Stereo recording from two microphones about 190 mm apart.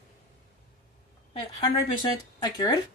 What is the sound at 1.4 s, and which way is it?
Speech, 25° left (ahead or behind).